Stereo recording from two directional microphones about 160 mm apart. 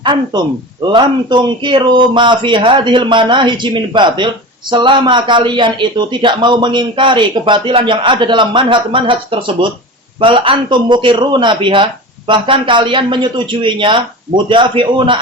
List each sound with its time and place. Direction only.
0.8 s a man's voice: 25° right (ahead or behind)